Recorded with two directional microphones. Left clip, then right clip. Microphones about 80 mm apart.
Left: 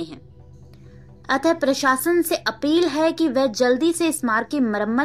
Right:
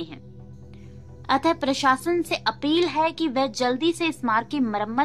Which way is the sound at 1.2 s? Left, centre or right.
Left.